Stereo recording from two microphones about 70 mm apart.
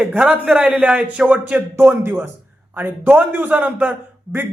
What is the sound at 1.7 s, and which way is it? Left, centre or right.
A man's voice, right.